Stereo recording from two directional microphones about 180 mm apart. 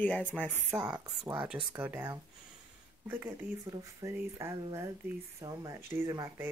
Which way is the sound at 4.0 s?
15° right (ahead or behind).